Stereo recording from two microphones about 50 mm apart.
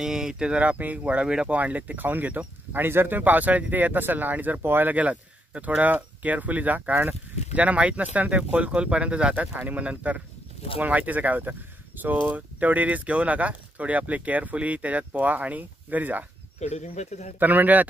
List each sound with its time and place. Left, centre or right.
0.0 s speech: centre
1.5 s speech: right
4.9 s speech: right
17.4 s speech: right